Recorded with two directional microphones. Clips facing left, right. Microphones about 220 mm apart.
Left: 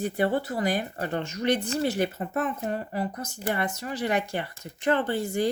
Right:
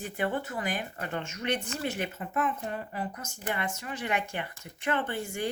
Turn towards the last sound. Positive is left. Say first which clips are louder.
# left 6 dB
turn(degrees=35)  # may be behind; listen again after turning